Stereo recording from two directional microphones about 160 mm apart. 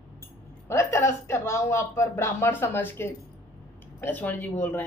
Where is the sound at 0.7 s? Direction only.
15° left (ahead or behind).